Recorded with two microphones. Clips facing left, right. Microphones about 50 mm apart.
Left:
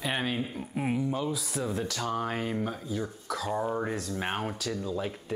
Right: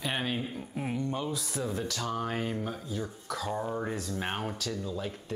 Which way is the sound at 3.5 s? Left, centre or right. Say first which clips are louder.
Left 4 dB; centre.